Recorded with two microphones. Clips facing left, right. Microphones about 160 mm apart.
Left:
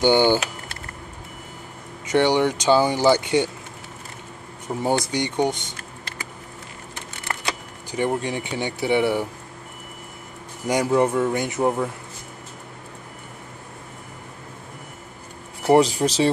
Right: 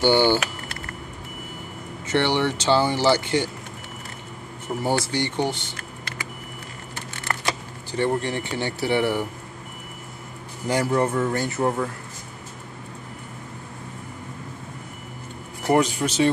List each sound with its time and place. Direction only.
0.0 s speech: 15° left (ahead or behind)
2.0 s speech: 15° left (ahead or behind)
4.8 s speech: 15° left (ahead or behind)
7.9 s speech: 10° left (ahead or behind)
10.7 s speech: 15° left (ahead or behind)
15.7 s speech: 35° left (ahead or behind)